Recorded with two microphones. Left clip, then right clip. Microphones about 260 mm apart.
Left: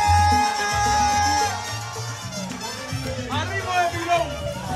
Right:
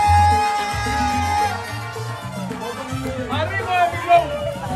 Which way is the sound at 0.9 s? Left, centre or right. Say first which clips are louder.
Left 1 dB; left.